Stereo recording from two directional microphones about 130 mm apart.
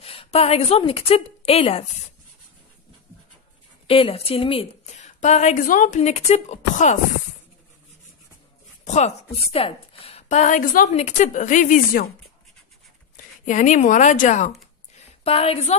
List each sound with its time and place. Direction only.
0.0 s a woman's voice: 50° left (ahead or behind)
3.8 s speech: 45° left (ahead or behind)
4.8 s a woman's voice: 60° left (ahead or behind)
8.8 s a woman's voice: 60° left (ahead or behind)
10.2 s a woman's voice: 70° left (ahead or behind); by 10.9 s 90° left
10.9 s a woman's voice: 60° left (ahead or behind); by 12.0 s 85° left
13.1 s speech: 75° left (ahead or behind)
15.0 s a sound: 50° left (ahead or behind)